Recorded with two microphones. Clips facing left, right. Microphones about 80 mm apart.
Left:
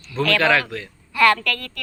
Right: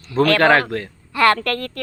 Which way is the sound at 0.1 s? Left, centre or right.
Right.